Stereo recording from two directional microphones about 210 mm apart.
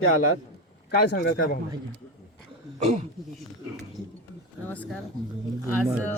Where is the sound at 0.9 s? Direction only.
55° left (ahead or behind).